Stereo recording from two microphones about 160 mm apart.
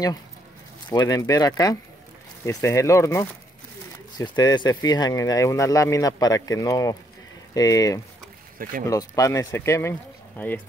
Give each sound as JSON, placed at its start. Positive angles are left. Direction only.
{"t": 0.8, "sound": "speech", "side_deg": 25}